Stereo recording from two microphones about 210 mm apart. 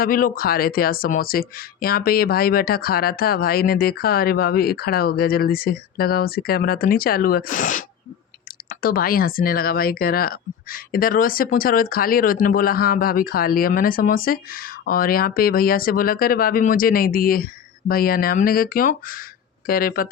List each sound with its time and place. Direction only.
0.0 s speech: 40° left (ahead or behind)